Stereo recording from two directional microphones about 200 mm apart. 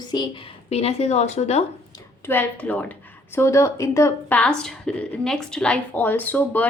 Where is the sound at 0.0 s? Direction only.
20° left (ahead or behind).